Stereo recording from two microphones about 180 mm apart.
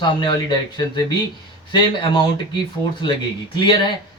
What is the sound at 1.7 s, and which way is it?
Speech, 25° left (ahead or behind).